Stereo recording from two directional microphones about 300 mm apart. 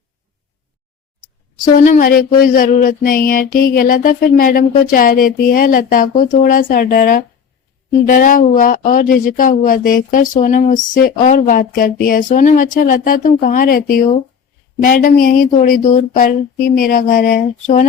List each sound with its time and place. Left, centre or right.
1.5 s speech: left